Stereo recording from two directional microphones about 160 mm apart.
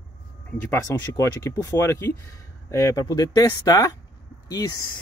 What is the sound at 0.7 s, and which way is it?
Speech, 20° left (ahead or behind).